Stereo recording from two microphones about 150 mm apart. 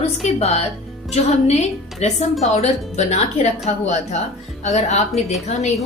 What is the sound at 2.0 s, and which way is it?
A woman's voice, 45° left (ahead or behind).